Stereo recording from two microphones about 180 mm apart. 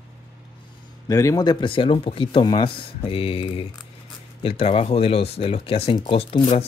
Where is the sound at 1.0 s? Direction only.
20° left (ahead or behind).